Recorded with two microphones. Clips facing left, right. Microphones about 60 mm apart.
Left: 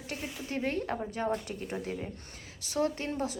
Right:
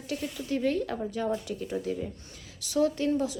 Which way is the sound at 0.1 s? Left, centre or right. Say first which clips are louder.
Right 5 dB; left.